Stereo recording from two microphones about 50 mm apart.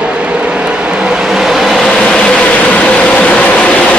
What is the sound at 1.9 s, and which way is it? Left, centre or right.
Vehicle, centre.